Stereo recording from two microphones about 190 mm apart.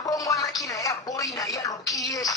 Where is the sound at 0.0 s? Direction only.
20° left (ahead or behind).